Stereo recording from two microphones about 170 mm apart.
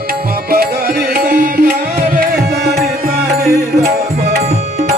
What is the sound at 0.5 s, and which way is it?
Music, 65° right (ahead or behind).